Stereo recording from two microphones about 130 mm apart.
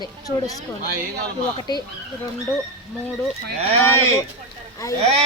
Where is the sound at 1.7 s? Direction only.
35° left (ahead or behind).